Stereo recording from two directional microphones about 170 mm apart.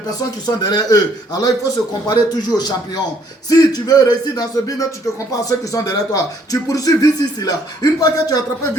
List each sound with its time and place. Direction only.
0.2 s speech: 25° left (ahead or behind)